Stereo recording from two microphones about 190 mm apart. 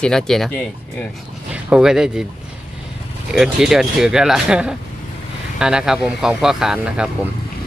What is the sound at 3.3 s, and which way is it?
Speech, centre (ahead or behind).